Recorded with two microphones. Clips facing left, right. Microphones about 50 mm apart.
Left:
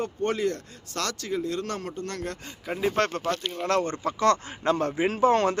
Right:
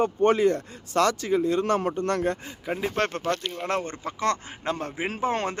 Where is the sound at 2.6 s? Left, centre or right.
Centre.